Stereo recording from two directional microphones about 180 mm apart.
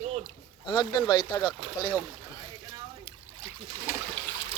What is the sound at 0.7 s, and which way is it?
Speech, 25° left (ahead or behind).